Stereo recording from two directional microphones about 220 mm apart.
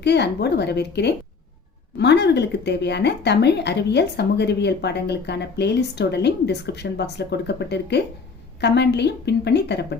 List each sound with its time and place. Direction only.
0.0 s speech: 50° left (ahead or behind)